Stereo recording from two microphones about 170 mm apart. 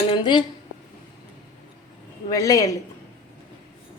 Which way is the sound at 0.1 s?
25° left (ahead or behind).